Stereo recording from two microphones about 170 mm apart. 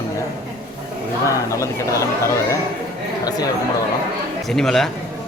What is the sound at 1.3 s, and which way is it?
Speech, 15° left (ahead or behind).